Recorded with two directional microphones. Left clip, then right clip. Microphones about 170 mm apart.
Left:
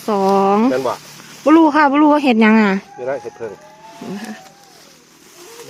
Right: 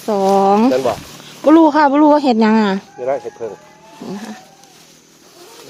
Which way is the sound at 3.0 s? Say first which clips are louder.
Right 5 dB; 35° left (ahead or behind).